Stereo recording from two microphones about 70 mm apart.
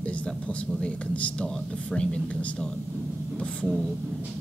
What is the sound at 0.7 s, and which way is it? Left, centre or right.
Speech, centre.